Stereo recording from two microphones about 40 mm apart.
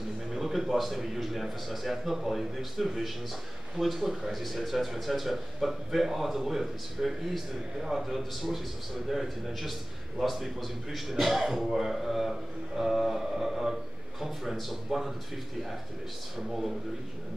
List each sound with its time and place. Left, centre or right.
0.3 s a man's voice: centre
16.3 s a man's voice: centre